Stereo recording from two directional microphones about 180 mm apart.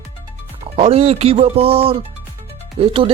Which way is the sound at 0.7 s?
35° right (ahead or behind).